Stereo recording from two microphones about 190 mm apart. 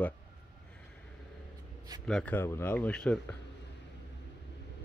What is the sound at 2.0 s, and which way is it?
Speech, 5° left (ahead or behind).